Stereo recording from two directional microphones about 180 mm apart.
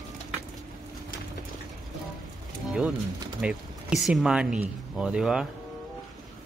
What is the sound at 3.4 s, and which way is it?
Speech, 5° right (ahead or behind).